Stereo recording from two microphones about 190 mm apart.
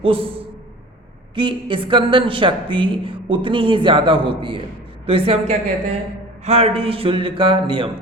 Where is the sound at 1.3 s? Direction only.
25° right (ahead or behind).